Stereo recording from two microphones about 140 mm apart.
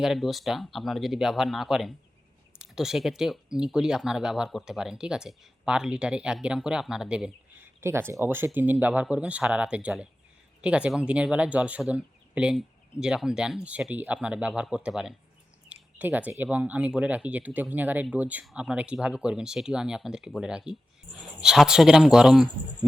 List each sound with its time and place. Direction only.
0.0 s speech: centre (ahead or behind)
7.8 s speech: 15° right (ahead or behind)